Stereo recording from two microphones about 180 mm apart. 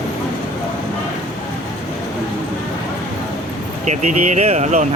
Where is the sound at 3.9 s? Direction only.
40° right (ahead or behind).